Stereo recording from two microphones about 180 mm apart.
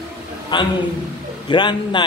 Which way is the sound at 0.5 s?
25° left (ahead or behind).